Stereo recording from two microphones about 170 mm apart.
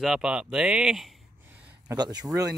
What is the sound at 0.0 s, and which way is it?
Speech, 5° right (ahead or behind).